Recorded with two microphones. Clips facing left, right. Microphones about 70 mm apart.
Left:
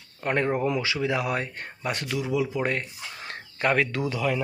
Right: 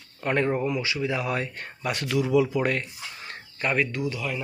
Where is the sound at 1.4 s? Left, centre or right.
Left.